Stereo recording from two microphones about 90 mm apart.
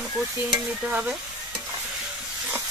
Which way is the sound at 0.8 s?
15° right (ahead or behind).